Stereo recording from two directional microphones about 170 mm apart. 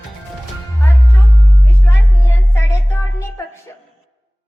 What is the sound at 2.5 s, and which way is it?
Music, 15° left (ahead or behind).